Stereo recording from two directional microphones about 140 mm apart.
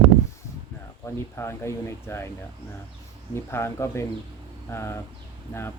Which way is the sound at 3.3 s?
20° left (ahead or behind).